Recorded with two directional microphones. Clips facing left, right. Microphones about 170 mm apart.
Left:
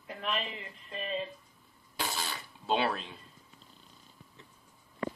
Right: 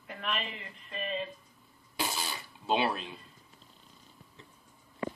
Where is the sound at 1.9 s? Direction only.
5° right (ahead or behind).